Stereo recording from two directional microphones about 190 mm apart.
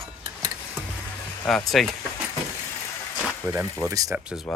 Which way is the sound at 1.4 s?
5° left (ahead or behind).